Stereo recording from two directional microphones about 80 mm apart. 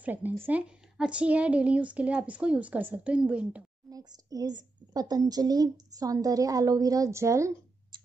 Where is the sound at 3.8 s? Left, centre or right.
Right.